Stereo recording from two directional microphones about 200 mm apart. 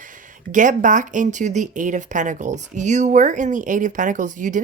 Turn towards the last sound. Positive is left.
turn(degrees=-40)  # may be behind; listen again after turning